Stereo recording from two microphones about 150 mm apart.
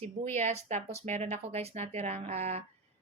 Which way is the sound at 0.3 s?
50° right (ahead or behind).